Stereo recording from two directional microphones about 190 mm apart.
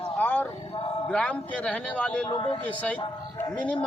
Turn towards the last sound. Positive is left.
turn(degrees=5)  # may be behind; listen again after turning